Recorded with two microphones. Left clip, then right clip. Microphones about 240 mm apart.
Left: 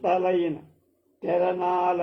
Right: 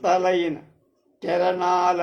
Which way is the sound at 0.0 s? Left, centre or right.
Right.